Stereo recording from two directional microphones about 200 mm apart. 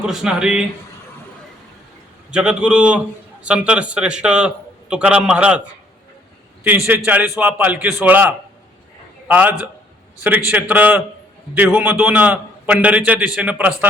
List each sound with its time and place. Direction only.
0.0 s a man's voice: centre (ahead or behind)
2.3 s a man's voice: 5° right (ahead or behind)
6.7 s a man's voice: 10° right (ahead or behind)